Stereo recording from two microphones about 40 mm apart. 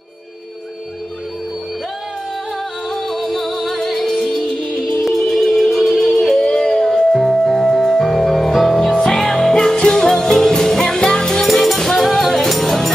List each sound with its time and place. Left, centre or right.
2.9 s music: centre
6.3 s music: left
11.4 s music: centre